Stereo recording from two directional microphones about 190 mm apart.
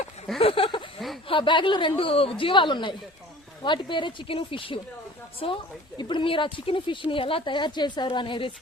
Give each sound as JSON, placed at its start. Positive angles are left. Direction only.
{"t": 0.3, "sound": "speech", "side_deg": 30}